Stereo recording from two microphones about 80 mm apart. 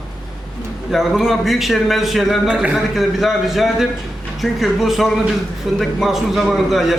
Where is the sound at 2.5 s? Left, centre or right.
Centre.